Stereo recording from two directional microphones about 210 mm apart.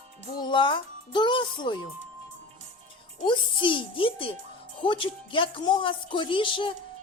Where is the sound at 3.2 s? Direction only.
25° left (ahead or behind).